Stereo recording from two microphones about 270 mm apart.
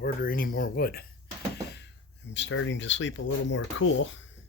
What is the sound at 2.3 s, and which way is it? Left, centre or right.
Speech, left.